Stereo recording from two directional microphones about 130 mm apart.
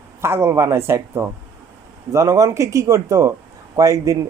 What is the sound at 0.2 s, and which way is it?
Speech, 20° right (ahead or behind).